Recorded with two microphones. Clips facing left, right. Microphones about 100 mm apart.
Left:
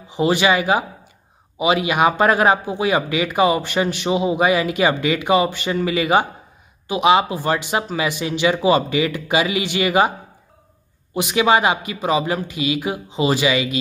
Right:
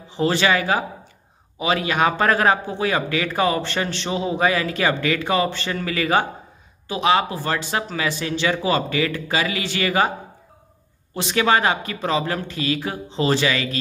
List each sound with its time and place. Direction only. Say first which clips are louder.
0.1 s a man's voice: left 2 dB; 15° left (ahead or behind)
11.1 s a man's voice: left 3 dB; 15° left (ahead or behind)